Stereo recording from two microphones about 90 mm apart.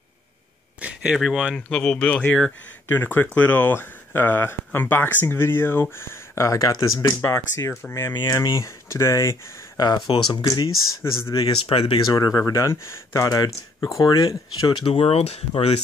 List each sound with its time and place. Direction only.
0.7 s a sound: 15° right (ahead or behind)
1.1 s speech: 5° right (ahead or behind)
1.7 s speech: 15° left (ahead or behind)
2.9 s speech: 25° left (ahead or behind)
9.8 s speech: 50° left (ahead or behind)
11.0 s speech: 30° left (ahead or behind)
11.6 s speech: 85° left
12.1 s speech: 45° left (ahead or behind)
14.7 s speech: 70° left (ahead or behind)